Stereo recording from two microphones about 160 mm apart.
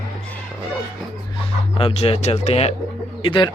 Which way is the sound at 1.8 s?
35° left (ahead or behind).